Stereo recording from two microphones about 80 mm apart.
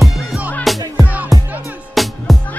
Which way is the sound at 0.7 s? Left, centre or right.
Centre.